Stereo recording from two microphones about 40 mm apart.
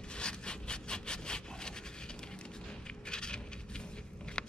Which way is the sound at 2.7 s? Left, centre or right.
Left.